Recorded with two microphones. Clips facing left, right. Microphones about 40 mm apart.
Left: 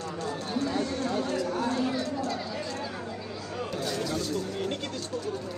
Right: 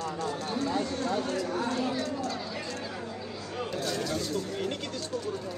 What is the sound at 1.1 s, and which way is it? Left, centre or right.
Chatter, left.